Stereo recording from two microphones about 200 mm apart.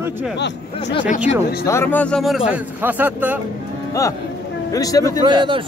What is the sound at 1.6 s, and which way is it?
A man's voice, 10° left (ahead or behind).